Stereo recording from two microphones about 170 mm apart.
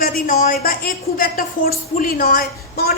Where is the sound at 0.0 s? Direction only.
55° left (ahead or behind).